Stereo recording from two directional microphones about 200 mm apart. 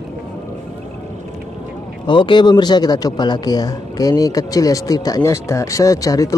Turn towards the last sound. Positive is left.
turn(degrees=15)  # may be behind; listen again after turning